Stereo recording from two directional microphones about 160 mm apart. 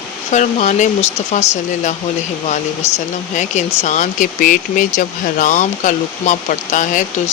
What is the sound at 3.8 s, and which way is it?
Speech, 50° left (ahead or behind).